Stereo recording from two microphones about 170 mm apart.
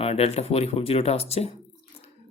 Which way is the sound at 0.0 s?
35° left (ahead or behind).